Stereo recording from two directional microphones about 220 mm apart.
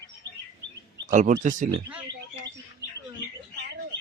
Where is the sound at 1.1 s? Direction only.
35° right (ahead or behind).